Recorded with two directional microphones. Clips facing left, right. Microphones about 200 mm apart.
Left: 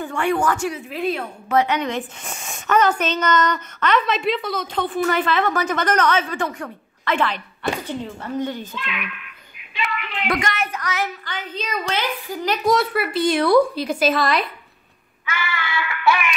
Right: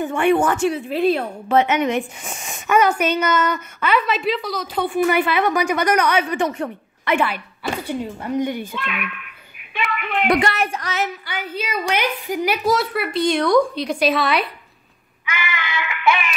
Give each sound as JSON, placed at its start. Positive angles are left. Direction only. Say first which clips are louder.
{"t": 0.0, "sound": "a woman's voice", "louder": "right 4 dB", "side_deg": -20}
{"t": 4.9, "sound": "a woman's voice", "louder": "right 2 dB", "side_deg": -10}
{"t": 8.7, "sound": "speech", "louder": "right 3 dB", "side_deg": -50}
{"t": 10.2, "sound": "speech", "louder": "right 5 dB", "side_deg": -25}
{"t": 11.2, "sound": "a woman's voice", "louder": "right 2 dB", "side_deg": -10}
{"t": 12.6, "sound": "a woman's voice", "louder": "left 1 dB", "side_deg": 0}
{"t": 15.2, "sound": "music", "louder": "even", "side_deg": -15}